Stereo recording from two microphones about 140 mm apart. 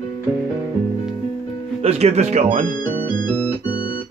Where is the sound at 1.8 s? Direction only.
50° right (ahead or behind).